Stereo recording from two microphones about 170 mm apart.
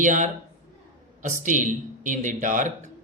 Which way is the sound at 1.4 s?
50° right (ahead or behind).